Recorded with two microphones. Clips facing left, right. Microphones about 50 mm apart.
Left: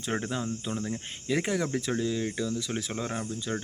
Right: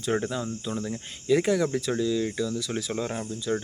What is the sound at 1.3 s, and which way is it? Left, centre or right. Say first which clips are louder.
Speech: right 5 dB; centre.